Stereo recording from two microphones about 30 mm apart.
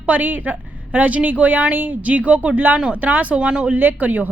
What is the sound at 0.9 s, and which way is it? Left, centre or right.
Speech, right.